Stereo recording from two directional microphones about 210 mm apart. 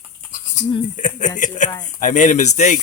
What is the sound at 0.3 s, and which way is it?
Sheep, 40° left (ahead or behind).